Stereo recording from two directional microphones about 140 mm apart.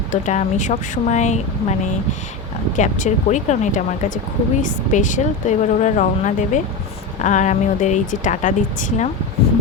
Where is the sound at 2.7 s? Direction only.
60° left (ahead or behind).